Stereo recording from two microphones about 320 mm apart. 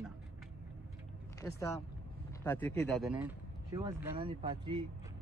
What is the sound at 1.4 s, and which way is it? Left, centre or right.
Speech, centre.